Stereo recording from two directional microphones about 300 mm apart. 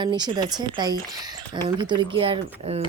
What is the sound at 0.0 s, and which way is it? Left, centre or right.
Speech, centre.